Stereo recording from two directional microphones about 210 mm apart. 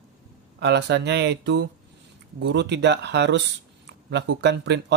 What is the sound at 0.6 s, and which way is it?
Speech, 55° right (ahead or behind).